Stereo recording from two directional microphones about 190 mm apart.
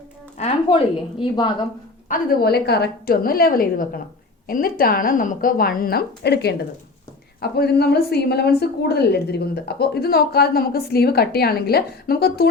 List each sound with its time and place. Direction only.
0.3 s a woman's voice: 30° left (ahead or behind)
2.0 s a woman's voice: 55° left (ahead or behind)